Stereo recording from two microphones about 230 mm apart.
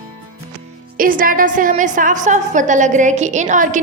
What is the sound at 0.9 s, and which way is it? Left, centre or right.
A woman's voice, right.